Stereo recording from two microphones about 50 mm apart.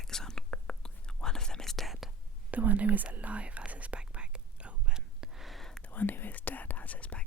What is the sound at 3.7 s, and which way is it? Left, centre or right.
Whispering, right.